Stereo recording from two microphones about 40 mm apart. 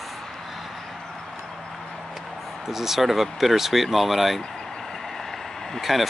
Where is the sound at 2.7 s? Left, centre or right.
Centre.